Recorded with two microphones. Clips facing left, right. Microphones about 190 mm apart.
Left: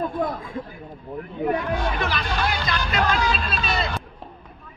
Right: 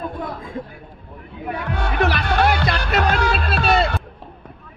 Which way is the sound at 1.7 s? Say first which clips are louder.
Right 4 dB; 65° right (ahead or behind).